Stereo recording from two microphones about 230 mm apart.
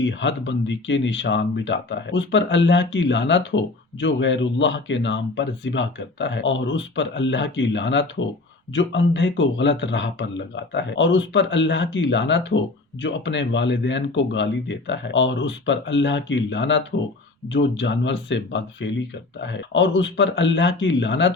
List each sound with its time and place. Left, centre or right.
0.0 s speech: left